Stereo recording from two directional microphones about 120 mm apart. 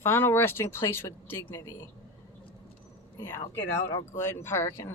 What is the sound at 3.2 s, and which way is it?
Speech, 25° left (ahead or behind).